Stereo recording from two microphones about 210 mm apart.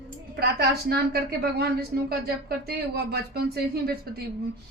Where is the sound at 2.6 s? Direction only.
50° right (ahead or behind).